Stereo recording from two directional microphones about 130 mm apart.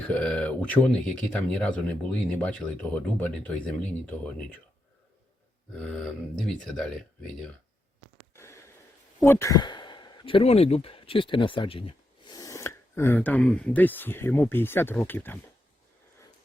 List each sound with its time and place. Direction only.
0.1 s speech: 5° left (ahead or behind)
6.5 s speech: 5° left (ahead or behind)
8.3 s a sound: 20° left (ahead or behind)
9.2 s speech: 20° left (ahead or behind)
9.6 s speech: 35° left (ahead or behind)
12.3 s speech: 25° left (ahead or behind)